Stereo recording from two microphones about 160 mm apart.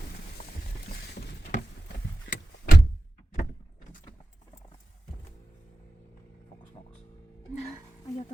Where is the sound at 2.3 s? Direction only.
70° left (ahead or behind).